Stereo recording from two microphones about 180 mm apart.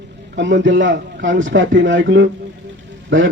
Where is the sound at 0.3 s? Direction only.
90° right.